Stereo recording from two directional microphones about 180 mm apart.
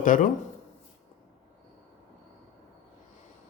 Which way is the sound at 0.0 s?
45° left (ahead or behind).